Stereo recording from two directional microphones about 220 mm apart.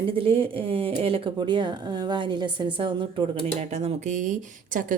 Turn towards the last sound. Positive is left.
turn(degrees=-35)  # may be behind; listen again after turning